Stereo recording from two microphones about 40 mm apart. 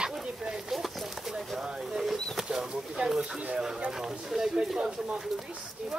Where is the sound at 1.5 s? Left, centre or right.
Centre.